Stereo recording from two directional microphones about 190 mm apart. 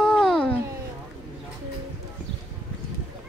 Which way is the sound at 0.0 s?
5° left (ahead or behind).